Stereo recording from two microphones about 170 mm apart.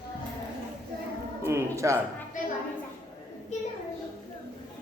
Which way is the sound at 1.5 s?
15° right (ahead or behind).